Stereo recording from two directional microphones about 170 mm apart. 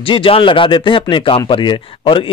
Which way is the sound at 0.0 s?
30° left (ahead or behind).